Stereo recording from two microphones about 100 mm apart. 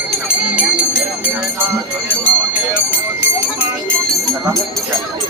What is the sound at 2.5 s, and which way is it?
Speech, 15° right (ahead or behind).